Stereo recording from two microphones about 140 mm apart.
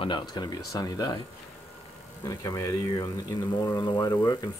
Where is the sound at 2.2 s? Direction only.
25° left (ahead or behind).